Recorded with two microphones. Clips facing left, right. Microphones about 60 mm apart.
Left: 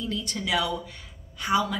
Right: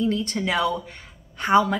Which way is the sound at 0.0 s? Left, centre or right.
Right.